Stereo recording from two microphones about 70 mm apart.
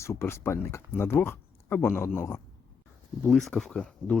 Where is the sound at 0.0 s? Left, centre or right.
Left.